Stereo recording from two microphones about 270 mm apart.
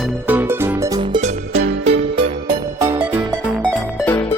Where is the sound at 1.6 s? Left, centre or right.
Right.